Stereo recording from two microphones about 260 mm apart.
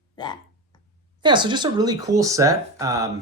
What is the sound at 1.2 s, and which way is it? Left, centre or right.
Speech, centre.